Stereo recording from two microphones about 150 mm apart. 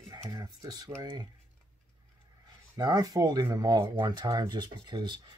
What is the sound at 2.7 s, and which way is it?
Speech, 25° right (ahead or behind).